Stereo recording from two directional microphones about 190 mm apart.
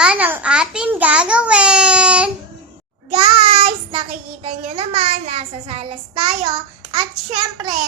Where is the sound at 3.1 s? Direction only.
25° right (ahead or behind).